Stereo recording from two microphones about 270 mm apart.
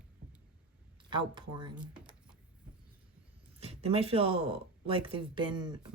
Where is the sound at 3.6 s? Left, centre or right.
Right.